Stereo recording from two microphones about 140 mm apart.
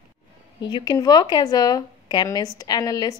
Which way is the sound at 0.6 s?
30° left (ahead or behind).